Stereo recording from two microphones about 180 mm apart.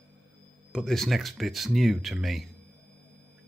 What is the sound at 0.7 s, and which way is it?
Speech, centre (ahead or behind).